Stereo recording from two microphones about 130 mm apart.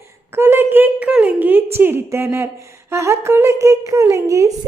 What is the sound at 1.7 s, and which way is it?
A woman's voice, 15° right (ahead or behind).